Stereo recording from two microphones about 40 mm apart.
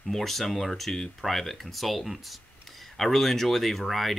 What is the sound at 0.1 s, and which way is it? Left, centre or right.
Speech, centre.